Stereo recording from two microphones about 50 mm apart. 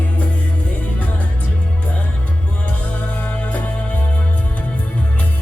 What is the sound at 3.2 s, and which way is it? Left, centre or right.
Music, left.